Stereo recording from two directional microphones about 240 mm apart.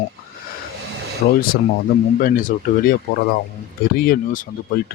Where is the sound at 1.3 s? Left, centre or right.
Left.